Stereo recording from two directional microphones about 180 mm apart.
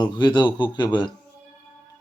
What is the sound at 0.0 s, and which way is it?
Speech, 25° left (ahead or behind).